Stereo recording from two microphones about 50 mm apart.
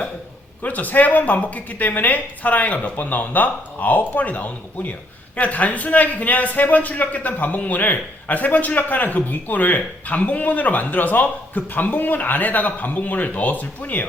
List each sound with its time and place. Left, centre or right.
0.6 s a man's voice: left